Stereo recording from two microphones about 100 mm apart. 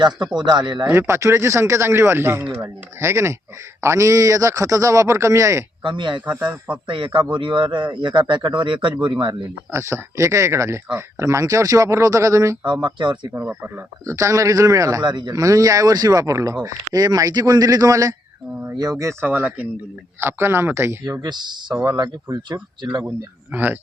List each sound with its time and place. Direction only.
0.3 s a man's voice: 45° right (ahead or behind)
1.0 s speech: 30° right (ahead or behind)
5.8 s a man's voice: 50° right (ahead or behind)
6.2 s a man's voice: 15° right (ahead or behind)
6.8 s a man's voice: 55° right (ahead or behind)
9.7 s speech: 30° right (ahead or behind)
12.6 s a man's voice: 50° right (ahead or behind)
13.3 s speech: 20° right (ahead or behind)
15.0 s a man's voice: 50° right (ahead or behind)
15.4 s speech: 35° right (ahead or behind)
19.2 s a man's voice: 15° right (ahead or behind)
21.0 s a man's voice: 40° right (ahead or behind)
23.0 s a man's voice: 20° right (ahead or behind)